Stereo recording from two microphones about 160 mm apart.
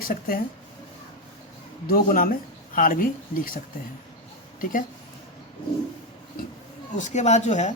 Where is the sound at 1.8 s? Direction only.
65° left (ahead or behind).